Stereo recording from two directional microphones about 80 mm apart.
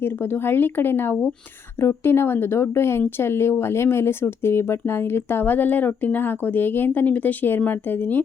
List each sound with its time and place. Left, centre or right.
0.0 s speech: left